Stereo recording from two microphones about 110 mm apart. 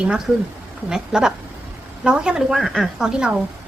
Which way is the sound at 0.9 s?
5° right (ahead or behind).